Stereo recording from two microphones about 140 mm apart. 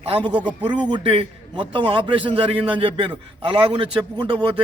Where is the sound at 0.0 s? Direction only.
40° right (ahead or behind).